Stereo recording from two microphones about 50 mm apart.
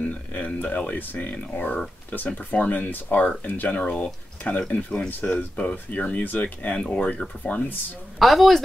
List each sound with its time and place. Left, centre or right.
0.0 s speech: left
8.2 s speech: centre